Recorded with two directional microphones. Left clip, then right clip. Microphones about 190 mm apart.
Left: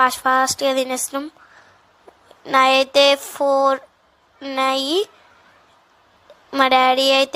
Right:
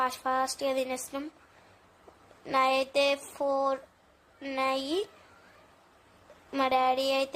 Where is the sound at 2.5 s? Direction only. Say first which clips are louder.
Left 12 dB; 20° left (ahead or behind).